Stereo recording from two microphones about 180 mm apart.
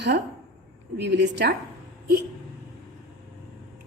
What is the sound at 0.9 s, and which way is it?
Speech, 70° right (ahead or behind).